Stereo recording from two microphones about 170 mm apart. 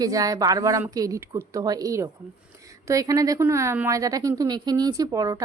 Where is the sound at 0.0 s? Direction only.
20° right (ahead or behind).